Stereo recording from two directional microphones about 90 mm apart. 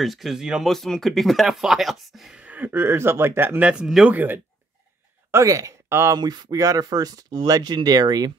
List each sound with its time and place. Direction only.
0.0 s speech: centre (ahead or behind)
0.7 s speech: 5° left (ahead or behind)
2.4 s speech: 20° right (ahead or behind)
4.1 s speech: 20° right (ahead or behind)
5.3 s speech: 35° right (ahead or behind)
6.1 s speech: 50° right (ahead or behind)